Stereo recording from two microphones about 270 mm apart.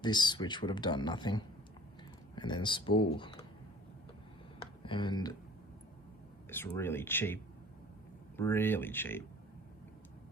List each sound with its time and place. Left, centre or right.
0.0 s speech: centre
4.6 s speech: centre
6.5 s speech: centre
8.4 s speech: centre